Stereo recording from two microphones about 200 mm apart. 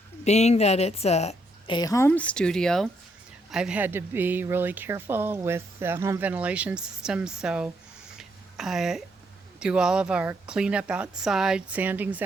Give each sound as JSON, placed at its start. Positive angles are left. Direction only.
{"t": 0.3, "sound": "a woman's voice", "side_deg": 35}
{"t": 8.2, "sound": "a sound", "side_deg": 0}
{"t": 9.6, "sound": "a woman's voice", "side_deg": -5}